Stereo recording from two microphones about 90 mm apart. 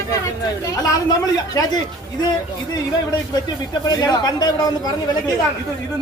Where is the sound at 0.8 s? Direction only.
45° left (ahead or behind).